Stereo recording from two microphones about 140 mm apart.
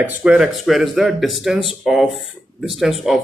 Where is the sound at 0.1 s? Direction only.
10° right (ahead or behind).